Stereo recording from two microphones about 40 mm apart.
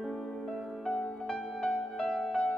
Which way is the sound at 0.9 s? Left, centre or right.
Left.